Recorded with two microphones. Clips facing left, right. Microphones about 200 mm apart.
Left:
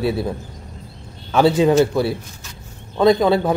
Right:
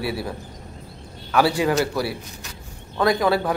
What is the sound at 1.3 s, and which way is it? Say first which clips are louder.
A man's voice: left 5 dB; 20° left (ahead or behind).